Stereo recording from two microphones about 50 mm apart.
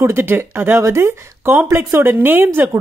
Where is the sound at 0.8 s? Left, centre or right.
Right.